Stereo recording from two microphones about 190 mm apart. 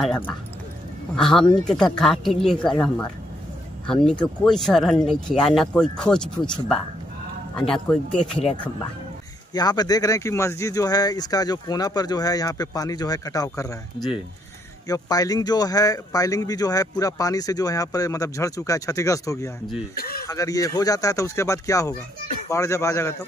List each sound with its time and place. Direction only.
0.0 s speech: 5° left (ahead or behind)
3.8 s speech: 5° left (ahead or behind)
9.5 s speech: 20° left (ahead or behind)
14.9 s speech: 20° left (ahead or behind)
20.0 s speech: 55° left (ahead or behind)
20.2 s speech: 20° left (ahead or behind)